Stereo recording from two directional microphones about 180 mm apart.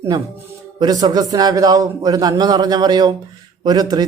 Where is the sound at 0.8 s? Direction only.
20° right (ahead or behind).